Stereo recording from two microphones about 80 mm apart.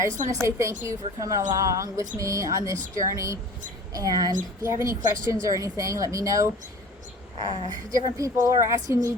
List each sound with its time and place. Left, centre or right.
0.4 s a woman's voice: right
4.6 s a woman's voice: right